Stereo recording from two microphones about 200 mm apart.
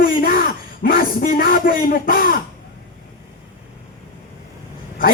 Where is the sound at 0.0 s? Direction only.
45° left (ahead or behind).